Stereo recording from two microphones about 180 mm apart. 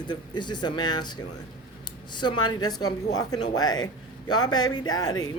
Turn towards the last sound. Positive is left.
turn(degrees=20)  # may be behind; listen again after turning